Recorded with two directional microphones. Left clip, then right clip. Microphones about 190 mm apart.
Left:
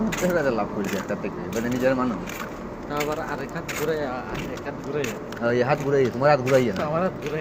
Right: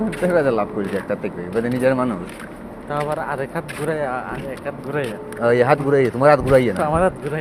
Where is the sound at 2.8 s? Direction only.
60° right (ahead or behind).